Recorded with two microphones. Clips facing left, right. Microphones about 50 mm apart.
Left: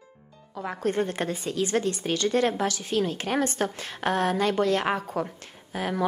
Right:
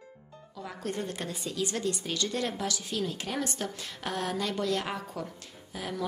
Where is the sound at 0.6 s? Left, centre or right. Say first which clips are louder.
Left 8 dB; left.